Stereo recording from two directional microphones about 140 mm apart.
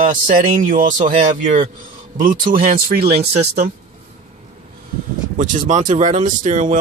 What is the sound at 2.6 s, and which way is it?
Speech, 90° right.